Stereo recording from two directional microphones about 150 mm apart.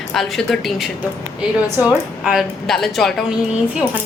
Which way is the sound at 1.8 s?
15° right (ahead or behind).